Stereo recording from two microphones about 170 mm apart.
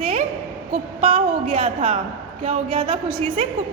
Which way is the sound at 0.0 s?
35° right (ahead or behind).